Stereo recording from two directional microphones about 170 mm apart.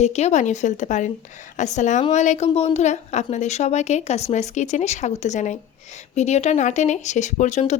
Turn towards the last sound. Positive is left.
turn(degrees=45)  # may be behind; listen again after turning